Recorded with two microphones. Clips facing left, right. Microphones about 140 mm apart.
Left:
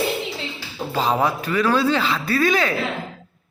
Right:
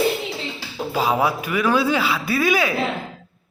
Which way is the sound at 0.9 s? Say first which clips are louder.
Even; 10° right (ahead or behind).